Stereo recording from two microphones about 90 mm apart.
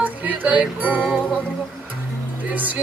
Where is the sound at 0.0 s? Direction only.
20° right (ahead or behind).